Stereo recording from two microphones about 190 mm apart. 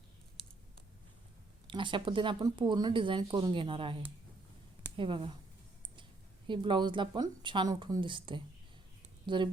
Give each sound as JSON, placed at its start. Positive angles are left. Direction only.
{"t": 1.6, "sound": "speech", "side_deg": -25}
{"t": 4.9, "sound": "speech", "side_deg": -25}
{"t": 6.5, "sound": "speech", "side_deg": -25}